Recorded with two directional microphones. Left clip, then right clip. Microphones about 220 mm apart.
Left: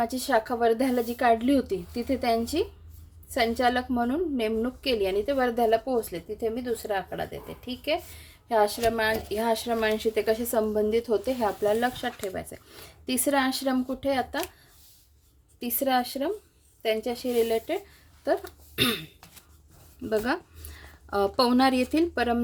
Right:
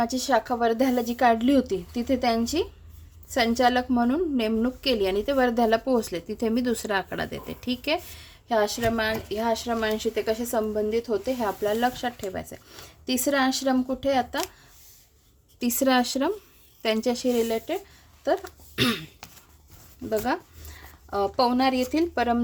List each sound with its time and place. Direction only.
0.0 s a woman's voice: 5° right (ahead or behind); by 7.9 s 25° right (ahead or behind)
8.2 s a woman's voice: 10° right (ahead or behind)
15.6 s a woman's voice: 20° right (ahead or behind)
20.1 s speech: 5° left (ahead or behind)